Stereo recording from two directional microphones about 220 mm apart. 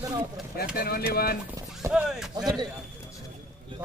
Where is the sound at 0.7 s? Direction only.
45° left (ahead or behind).